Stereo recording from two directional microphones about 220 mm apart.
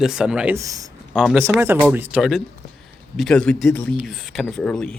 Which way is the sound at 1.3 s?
10° right (ahead or behind).